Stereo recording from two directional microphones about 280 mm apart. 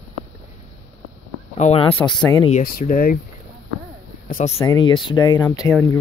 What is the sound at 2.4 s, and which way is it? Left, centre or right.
Speech, left.